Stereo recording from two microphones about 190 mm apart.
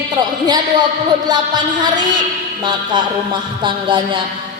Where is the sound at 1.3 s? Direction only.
20° right (ahead or behind).